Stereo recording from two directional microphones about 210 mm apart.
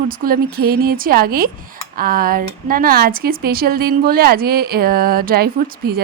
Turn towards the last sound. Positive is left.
turn(degrees=-45)  # may be behind; listen again after turning